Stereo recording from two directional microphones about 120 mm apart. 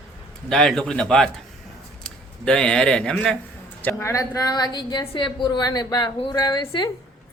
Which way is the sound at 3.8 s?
25° left (ahead or behind).